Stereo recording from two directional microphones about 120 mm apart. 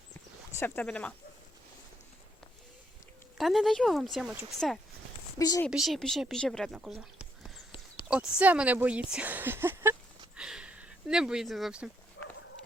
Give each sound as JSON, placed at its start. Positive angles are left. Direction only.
{"t": 0.5, "sound": "speech", "side_deg": 15}
{"t": 3.3, "sound": "speech", "side_deg": 0}
{"t": 5.4, "sound": "speech", "side_deg": 30}
{"t": 5.7, "sound": "speech", "side_deg": 0}
{"t": 6.7, "sound": "a sound", "side_deg": -5}
{"t": 8.4, "sound": "speech", "side_deg": -10}
{"t": 10.3, "sound": "a sound", "side_deg": -10}